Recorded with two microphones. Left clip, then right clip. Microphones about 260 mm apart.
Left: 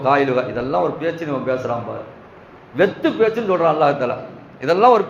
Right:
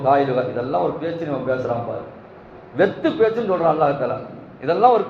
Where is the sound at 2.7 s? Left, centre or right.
Left.